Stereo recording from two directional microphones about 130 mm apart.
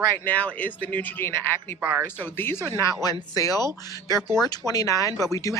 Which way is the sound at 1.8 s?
15° right (ahead or behind).